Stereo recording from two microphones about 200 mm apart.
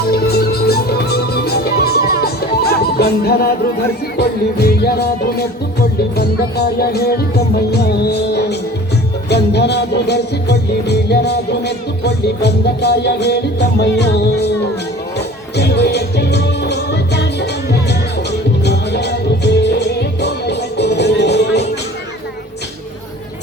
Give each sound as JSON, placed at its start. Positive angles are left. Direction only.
{"t": 0.0, "sound": "music", "side_deg": 50}
{"t": 15.5, "sound": "music", "side_deg": 55}